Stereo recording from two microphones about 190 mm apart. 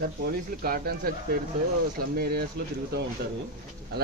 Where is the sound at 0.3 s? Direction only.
55° right (ahead or behind).